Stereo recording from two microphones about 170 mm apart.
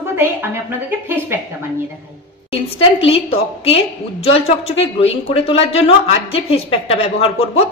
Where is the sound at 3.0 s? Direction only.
35° left (ahead or behind).